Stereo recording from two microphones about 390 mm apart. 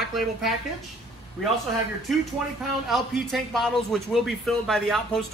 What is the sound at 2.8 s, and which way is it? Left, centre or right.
A man's voice, centre.